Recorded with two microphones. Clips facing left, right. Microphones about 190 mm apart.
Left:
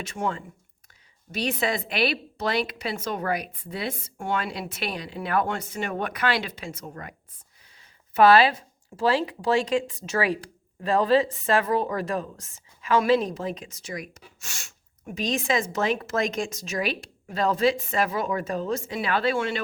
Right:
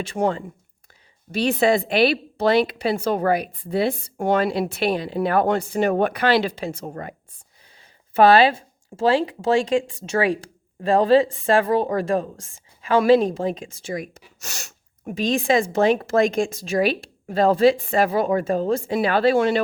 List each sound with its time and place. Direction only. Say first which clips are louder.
0.0 s speech: right 7 dB; 35° right (ahead or behind)
8.1 s speech: right 3 dB; 30° right (ahead or behind)